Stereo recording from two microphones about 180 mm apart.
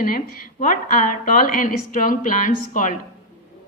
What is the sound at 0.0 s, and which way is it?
A woman's voice, 50° left (ahead or behind).